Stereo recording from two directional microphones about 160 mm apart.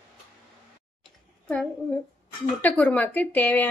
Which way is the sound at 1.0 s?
5° left (ahead or behind).